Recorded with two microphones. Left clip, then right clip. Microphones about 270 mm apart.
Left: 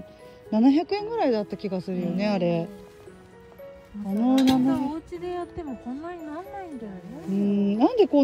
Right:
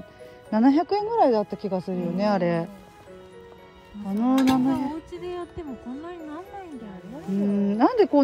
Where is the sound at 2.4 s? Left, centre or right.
Right.